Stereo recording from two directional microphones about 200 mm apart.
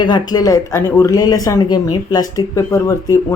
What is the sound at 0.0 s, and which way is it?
Speech, 20° left (ahead or behind).